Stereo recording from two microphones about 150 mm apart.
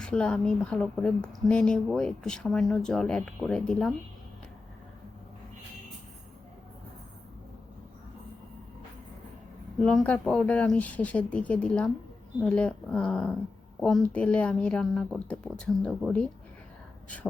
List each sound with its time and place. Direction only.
0.0 s a woman's voice: 5° left (ahead or behind)
9.8 s a woman's voice: 5° left (ahead or behind)